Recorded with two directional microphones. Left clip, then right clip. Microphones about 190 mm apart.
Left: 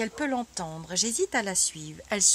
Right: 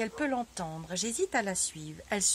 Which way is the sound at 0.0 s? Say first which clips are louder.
Left 2 dB; 40° left (ahead or behind).